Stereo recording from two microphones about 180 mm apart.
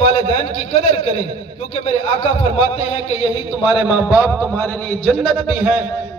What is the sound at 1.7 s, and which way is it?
A man's voice, 35° left (ahead or behind).